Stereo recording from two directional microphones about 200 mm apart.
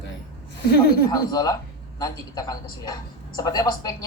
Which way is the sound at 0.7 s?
50° left (ahead or behind).